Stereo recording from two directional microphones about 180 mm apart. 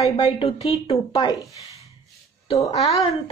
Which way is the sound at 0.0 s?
30° left (ahead or behind).